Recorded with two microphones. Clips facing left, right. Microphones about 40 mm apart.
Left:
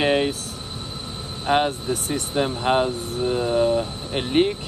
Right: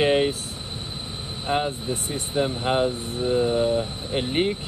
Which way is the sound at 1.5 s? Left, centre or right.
Left.